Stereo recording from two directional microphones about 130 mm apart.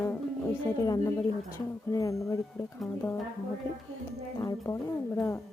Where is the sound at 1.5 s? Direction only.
25° left (ahead or behind).